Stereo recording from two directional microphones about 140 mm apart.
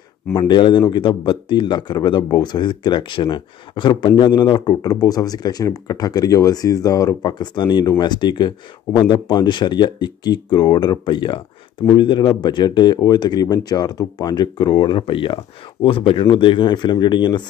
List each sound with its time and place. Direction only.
0.3 s speech: 35° left (ahead or behind)